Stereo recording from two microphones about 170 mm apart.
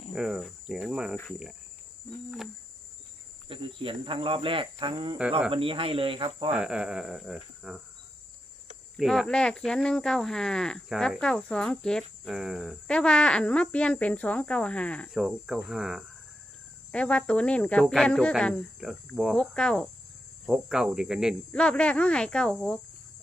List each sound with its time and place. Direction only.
0.1 s speech: 5° right (ahead or behind)
3.5 s speech: 30° right (ahead or behind)
6.5 s speech: 5° right (ahead or behind)
9.0 s speech: centre (ahead or behind)